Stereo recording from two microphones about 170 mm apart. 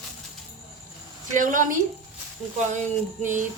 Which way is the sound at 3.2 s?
50° right (ahead or behind).